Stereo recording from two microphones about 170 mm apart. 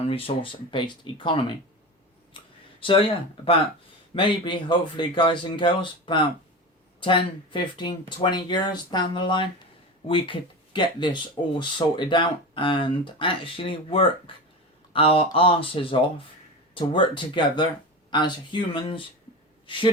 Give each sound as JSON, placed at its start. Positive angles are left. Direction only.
{"t": 0.1, "sound": "speech", "side_deg": 35}
{"t": 2.8, "sound": "speech", "side_deg": 30}